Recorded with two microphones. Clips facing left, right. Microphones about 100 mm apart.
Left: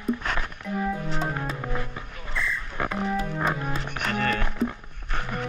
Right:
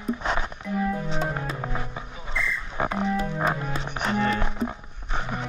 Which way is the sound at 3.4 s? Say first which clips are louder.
Right 1 dB; centre (ahead or behind).